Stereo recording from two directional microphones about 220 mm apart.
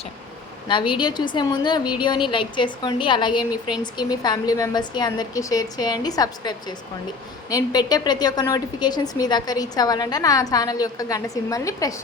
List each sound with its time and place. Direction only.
0.7 s a woman's voice: 20° left (ahead or behind)